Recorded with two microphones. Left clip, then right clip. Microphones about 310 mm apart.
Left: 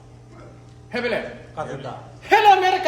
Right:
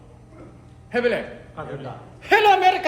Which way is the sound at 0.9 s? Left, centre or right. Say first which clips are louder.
Right 3 dB; centre.